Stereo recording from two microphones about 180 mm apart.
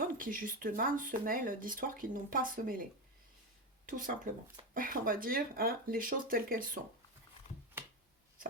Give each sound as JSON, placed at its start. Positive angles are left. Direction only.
{"t": 0.0, "sound": "speech", "side_deg": -50}
{"t": 3.8, "sound": "speech", "side_deg": -50}